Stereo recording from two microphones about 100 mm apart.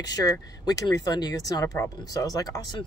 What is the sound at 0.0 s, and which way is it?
Speech, 40° left (ahead or behind).